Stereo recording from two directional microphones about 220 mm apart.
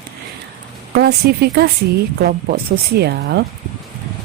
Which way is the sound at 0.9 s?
50° right (ahead or behind).